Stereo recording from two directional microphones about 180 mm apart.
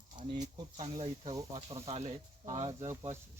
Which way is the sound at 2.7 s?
15° right (ahead or behind).